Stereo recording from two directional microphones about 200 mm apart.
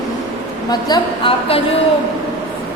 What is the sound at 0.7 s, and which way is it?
Speech, 20° left (ahead or behind).